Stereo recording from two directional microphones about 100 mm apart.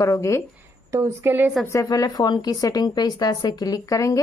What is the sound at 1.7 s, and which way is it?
A woman's voice, 40° left (ahead or behind).